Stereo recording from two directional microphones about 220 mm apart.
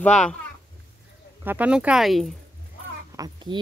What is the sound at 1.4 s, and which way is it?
Speech, 10° right (ahead or behind).